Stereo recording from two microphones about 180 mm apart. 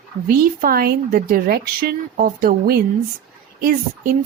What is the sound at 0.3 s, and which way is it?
Speech, 55° right (ahead or behind).